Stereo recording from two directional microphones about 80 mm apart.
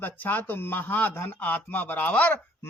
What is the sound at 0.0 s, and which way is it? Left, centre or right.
Speech, left.